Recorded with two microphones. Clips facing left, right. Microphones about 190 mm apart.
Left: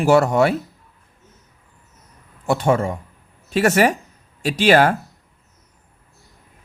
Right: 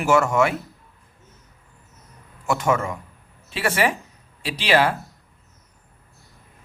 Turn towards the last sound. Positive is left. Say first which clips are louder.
# left 5 dB
turn(degrees=45)  # may be behind; listen again after turning